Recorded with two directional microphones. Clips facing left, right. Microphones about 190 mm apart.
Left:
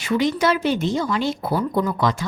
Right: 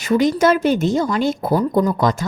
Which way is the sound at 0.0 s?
45° right (ahead or behind).